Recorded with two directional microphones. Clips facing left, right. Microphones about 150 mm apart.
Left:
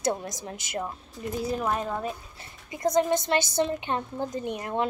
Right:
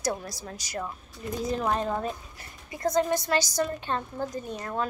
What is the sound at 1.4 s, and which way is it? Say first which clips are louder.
Speech: right 1 dB; 5° left (ahead or behind).